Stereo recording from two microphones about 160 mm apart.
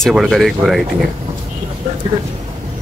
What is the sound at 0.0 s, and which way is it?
Speech, centre (ahead or behind).